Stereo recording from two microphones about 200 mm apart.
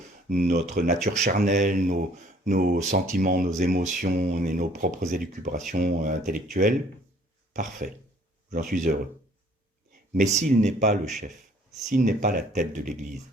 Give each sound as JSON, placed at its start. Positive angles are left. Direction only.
{"t": 0.3, "sound": "speech", "side_deg": -45}
{"t": 10.2, "sound": "speech", "side_deg": -35}